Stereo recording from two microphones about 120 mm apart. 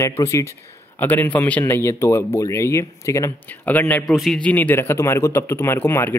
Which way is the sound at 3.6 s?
15° left (ahead or behind).